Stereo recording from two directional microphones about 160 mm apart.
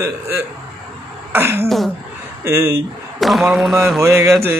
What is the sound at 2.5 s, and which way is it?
Speech, 15° right (ahead or behind).